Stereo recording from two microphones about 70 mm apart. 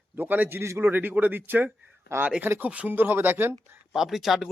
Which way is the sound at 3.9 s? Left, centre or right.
Centre.